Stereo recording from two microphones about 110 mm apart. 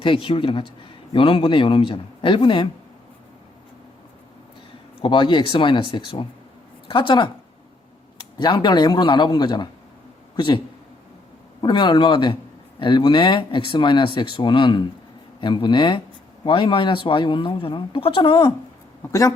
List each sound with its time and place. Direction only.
0.0 s speech: 50° left (ahead or behind)
5.0 s a woman's voice: 45° left (ahead or behind)
8.4 s speech: 40° left (ahead or behind)
11.6 s speech: 45° left (ahead or behind)